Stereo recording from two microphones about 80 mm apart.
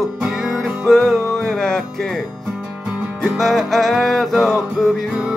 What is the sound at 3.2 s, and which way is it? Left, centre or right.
Music, centre.